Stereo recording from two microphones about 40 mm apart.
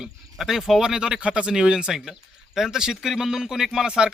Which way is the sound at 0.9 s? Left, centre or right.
Centre.